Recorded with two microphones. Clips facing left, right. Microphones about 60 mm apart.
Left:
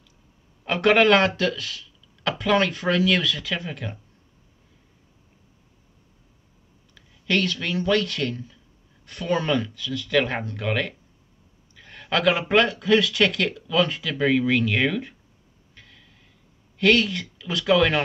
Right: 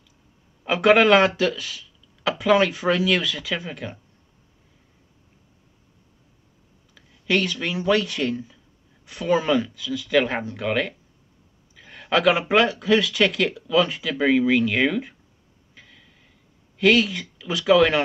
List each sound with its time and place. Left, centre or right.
0.7 s speech: centre
7.0 s speech: centre
15.7 s a sound: centre
16.7 s speech: centre